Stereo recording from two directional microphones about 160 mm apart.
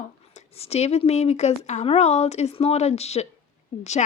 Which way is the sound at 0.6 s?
40° left (ahead or behind).